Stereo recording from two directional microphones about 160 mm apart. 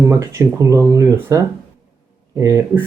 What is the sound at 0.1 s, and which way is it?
Speech, 20° right (ahead or behind).